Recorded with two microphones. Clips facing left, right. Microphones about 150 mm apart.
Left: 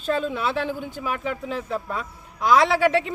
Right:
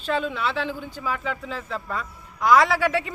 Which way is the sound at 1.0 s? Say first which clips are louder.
Right 1 dB; 20° left (ahead or behind).